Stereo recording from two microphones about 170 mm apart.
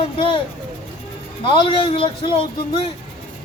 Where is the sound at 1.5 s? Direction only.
30° left (ahead or behind).